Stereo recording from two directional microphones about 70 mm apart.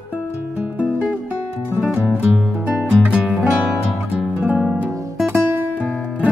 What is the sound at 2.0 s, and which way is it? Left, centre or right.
Music, right.